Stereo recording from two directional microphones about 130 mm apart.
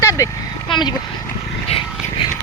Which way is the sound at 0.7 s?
35° left (ahead or behind).